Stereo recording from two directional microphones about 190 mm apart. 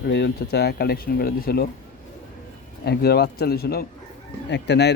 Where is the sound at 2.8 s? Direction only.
60° left (ahead or behind).